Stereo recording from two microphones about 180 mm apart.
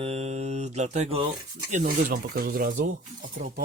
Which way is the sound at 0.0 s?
35° right (ahead or behind).